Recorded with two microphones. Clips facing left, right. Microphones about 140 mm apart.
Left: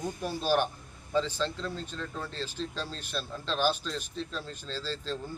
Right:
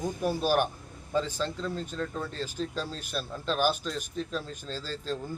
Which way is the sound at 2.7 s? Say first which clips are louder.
Right 2 dB; 10° right (ahead or behind).